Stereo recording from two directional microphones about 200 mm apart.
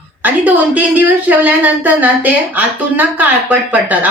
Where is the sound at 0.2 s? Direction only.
10° right (ahead or behind).